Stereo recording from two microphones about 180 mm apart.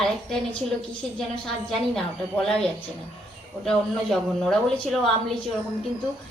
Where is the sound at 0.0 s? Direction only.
Centre (ahead or behind).